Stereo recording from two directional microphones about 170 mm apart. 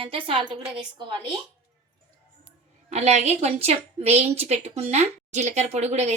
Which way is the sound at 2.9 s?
40° right (ahead or behind).